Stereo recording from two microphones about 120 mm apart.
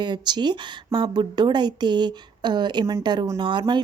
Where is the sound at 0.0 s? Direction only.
35° right (ahead or behind).